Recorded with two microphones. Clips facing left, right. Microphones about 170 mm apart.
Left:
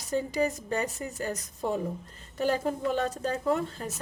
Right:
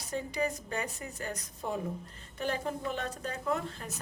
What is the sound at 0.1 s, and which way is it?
A woman's voice, 35° left (ahead or behind).